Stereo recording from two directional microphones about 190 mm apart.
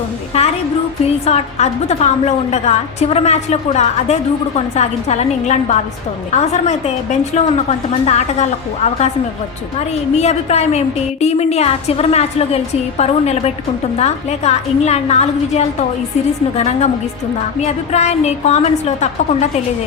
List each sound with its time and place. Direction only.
0.3 s a sound: 35° left (ahead or behind)
1.0 s a woman's voice: 35° left (ahead or behind)
9.9 s a woman's voice: 35° left (ahead or behind)